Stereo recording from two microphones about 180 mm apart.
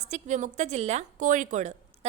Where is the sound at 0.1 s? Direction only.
40° right (ahead or behind).